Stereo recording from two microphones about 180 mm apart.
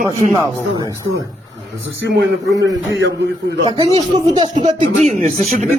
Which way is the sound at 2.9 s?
80° right.